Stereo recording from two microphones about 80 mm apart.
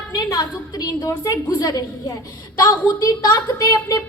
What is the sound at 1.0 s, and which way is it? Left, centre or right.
Speech, left.